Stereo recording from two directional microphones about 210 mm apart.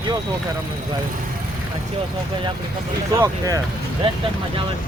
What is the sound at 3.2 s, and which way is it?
Speech, 15° right (ahead or behind).